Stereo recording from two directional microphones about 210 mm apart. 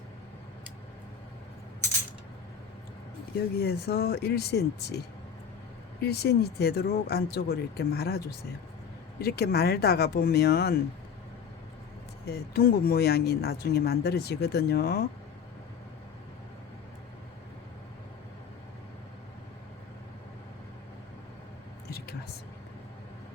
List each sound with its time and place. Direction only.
3.5 s speech: 50° left (ahead or behind)
12.2 s speech: 50° left (ahead or behind)